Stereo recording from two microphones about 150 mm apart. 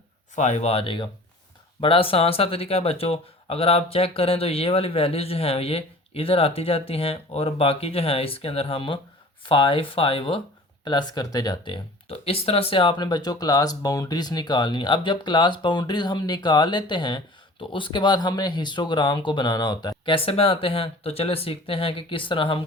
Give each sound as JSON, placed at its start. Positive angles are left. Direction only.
{"t": 0.3, "sound": "speech", "side_deg": 50}